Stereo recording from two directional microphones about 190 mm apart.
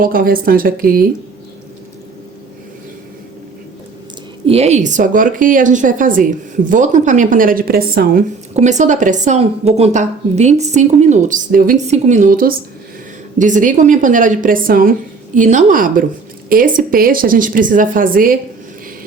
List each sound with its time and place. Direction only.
0.0 s speech: 50° right (ahead or behind)
4.4 s speech: 35° right (ahead or behind); by 8.2 s 50° right (ahead or behind)
8.5 s a woman's voice: 40° right (ahead or behind)